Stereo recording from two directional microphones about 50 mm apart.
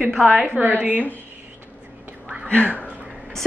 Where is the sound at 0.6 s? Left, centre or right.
Right.